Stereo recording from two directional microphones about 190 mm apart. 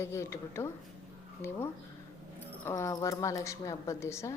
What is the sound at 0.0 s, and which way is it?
A woman's voice, 15° left (ahead or behind).